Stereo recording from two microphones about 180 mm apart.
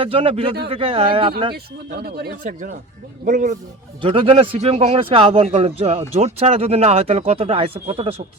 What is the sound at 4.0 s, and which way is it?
A man's voice, 30° right (ahead or behind).